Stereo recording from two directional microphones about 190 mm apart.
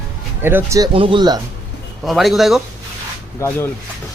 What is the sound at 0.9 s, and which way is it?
Speech, 25° right (ahead or behind).